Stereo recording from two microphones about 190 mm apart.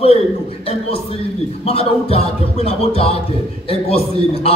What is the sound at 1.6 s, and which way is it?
A man's voice, 30° left (ahead or behind).